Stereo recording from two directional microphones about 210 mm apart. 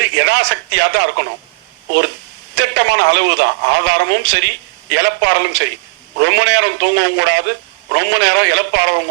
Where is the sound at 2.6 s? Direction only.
55° right (ahead or behind).